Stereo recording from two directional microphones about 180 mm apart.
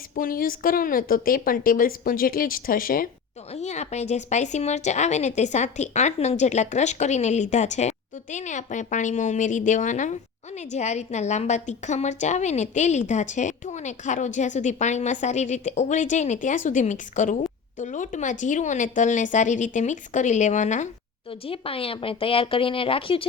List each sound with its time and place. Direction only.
0.2 s a woman's voice: 50° left (ahead or behind)
3.5 s a woman's voice: 40° left (ahead or behind)